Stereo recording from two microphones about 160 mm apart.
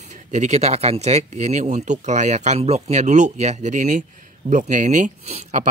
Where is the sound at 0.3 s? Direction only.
45° right (ahead or behind).